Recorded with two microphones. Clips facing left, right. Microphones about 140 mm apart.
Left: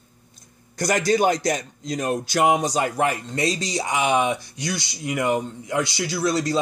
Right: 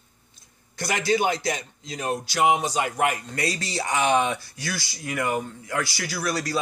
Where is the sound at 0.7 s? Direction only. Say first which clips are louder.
Left 4 dB; 45° left (ahead or behind).